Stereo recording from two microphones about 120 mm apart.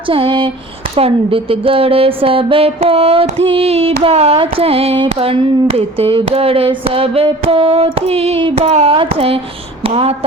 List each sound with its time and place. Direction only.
0.1 s speech: 45° right (ahead or behind)
0.9 s speech: 55° right (ahead or behind)